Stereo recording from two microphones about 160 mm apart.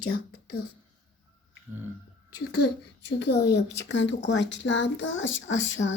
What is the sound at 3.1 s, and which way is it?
Speech, 90° left.